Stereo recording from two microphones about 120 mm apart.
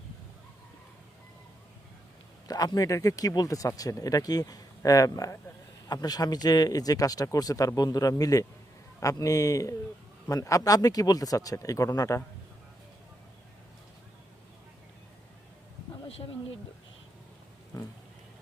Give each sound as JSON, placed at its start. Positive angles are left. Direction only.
{"t": 2.5, "sound": "speech", "side_deg": 35}
{"t": 16.0, "sound": "a sound", "side_deg": 50}
{"t": 17.7, "sound": "speech", "side_deg": 30}